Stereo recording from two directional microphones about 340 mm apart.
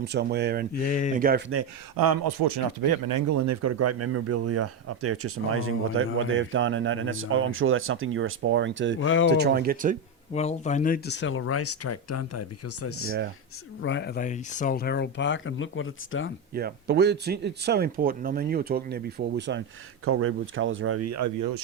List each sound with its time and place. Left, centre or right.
0.0 s speech: right
0.9 s speech: left
1.1 s speech: right
2.0 s speech: right
9.0 s speech: left
9.3 s speech: right
10.3 s speech: centre; by 13.1 s left
13.8 s speech: left
16.6 s speech: right